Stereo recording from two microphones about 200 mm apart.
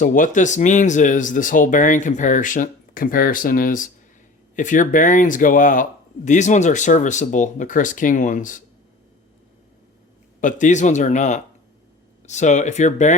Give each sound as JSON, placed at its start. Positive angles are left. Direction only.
{"t": 0.0, "sound": "speech", "side_deg": 40}
{"t": 10.4, "sound": "speech", "side_deg": 40}